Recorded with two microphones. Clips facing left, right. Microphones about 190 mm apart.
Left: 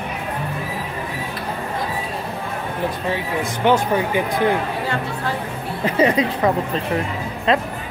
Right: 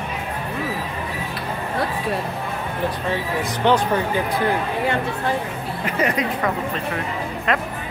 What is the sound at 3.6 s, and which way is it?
Speech, 10° left (ahead or behind).